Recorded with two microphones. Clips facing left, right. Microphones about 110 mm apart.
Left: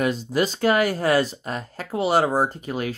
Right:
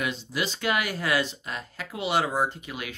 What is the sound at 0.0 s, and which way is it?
Speech, 45° left (ahead or behind).